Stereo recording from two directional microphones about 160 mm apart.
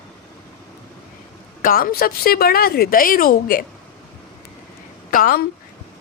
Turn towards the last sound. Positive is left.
turn(degrees=60)  # may be behind; listen again after turning